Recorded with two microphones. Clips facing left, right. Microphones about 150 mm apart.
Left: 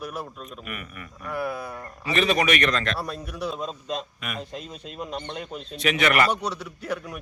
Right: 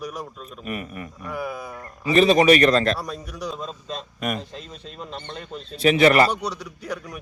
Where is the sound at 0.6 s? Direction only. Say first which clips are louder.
Right 11 dB; 35° right (ahead or behind).